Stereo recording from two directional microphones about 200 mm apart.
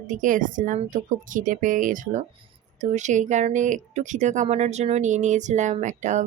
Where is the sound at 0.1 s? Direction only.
40° right (ahead or behind).